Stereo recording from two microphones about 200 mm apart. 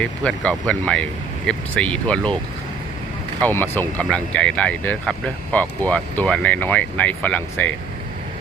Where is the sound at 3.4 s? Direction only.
10° left (ahead or behind).